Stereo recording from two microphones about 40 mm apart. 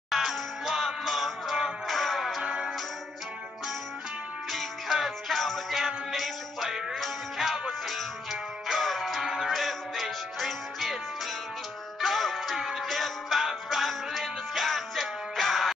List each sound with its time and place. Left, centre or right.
0.1 s music: centre
2.4 s music: right
4.5 s music: centre
12.0 s music: centre